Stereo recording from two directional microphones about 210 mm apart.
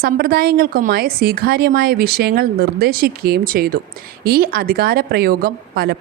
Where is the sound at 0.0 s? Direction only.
45° right (ahead or behind).